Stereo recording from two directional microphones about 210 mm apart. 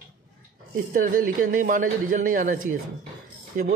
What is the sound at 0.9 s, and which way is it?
A man's voice, 40° right (ahead or behind).